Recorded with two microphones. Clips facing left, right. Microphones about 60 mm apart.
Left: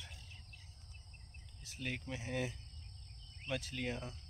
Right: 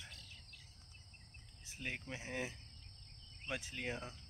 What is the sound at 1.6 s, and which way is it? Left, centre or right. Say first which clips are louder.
Speech: left 2 dB; right.